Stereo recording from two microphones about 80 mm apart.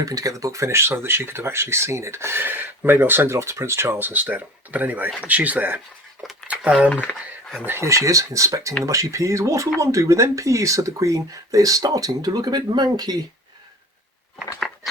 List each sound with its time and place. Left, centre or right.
0.0 s speech: right
6.5 s a sound: centre
7.6 s speech: right